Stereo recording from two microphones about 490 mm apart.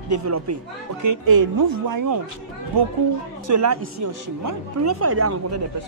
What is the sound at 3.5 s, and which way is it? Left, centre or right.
Speech, right.